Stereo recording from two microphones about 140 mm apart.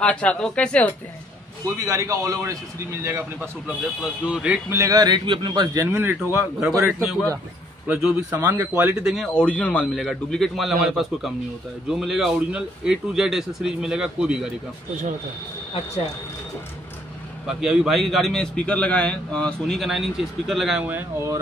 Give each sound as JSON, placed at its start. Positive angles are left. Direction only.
{"t": 0.0, "sound": "speech", "side_deg": 10}
{"t": 1.9, "sound": "a man's voice", "side_deg": -25}
{"t": 4.7, "sound": "a man's voice", "side_deg": -25}
{"t": 5.8, "sound": "a man's voice", "side_deg": -20}
{"t": 7.8, "sound": "a man's voice", "side_deg": -10}
{"t": 9.1, "sound": "a man's voice", "side_deg": 5}
{"t": 17.5, "sound": "a man's voice", "side_deg": -5}
{"t": 20.8, "sound": "a man's voice", "side_deg": -10}